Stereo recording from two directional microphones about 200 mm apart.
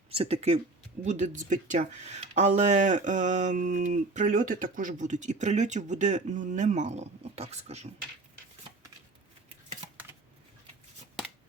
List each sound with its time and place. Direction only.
0.1 s speech: 30° right (ahead or behind)